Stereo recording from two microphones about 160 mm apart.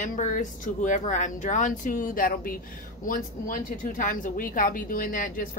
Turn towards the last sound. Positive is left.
turn(degrees=60)  # may be behind; listen again after turning